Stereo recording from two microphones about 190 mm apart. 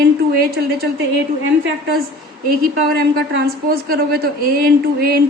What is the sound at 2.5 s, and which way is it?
A woman's voice, 55° right (ahead or behind).